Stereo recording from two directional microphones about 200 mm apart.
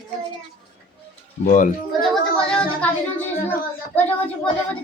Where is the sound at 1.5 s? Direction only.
40° left (ahead or behind).